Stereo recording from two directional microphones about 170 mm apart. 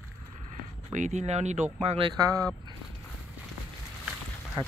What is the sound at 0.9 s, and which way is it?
Speech, 45° right (ahead or behind).